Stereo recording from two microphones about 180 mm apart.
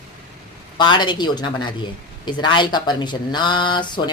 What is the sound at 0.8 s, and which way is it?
Speech, 25° left (ahead or behind).